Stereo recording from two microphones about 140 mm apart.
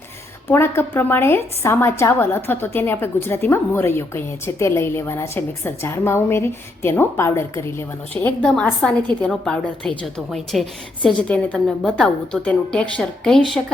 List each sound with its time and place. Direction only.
0.4 s a woman's voice: 20° left (ahead or behind); by 13.6 s 5° left (ahead or behind)